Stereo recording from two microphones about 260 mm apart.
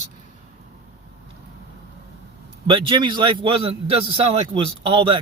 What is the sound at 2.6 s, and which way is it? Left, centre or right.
A man's voice, centre.